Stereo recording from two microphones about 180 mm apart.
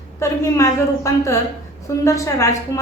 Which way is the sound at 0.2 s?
15° left (ahead or behind).